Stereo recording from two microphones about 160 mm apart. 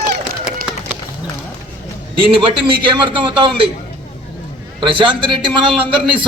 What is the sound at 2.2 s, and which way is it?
A man's voice, 35° right (ahead or behind).